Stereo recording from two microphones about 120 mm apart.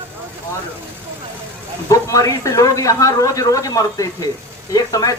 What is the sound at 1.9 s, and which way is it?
Speech, 30° left (ahead or behind).